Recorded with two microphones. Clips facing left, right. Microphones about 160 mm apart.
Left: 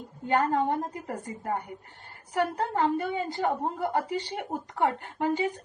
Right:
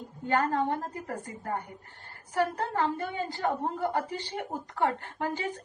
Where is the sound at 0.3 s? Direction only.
15° left (ahead or behind).